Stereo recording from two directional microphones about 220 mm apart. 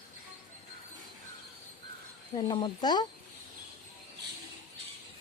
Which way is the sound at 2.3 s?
20° left (ahead or behind).